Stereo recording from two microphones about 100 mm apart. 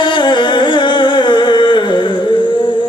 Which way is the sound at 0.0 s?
50° left (ahead or behind).